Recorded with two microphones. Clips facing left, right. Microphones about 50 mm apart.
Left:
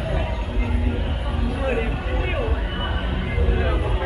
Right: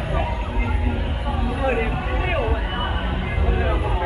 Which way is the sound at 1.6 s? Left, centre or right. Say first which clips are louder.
Right 2 dB; centre.